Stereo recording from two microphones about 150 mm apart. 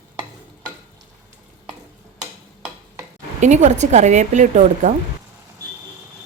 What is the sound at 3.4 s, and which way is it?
Speech, 50° right (ahead or behind).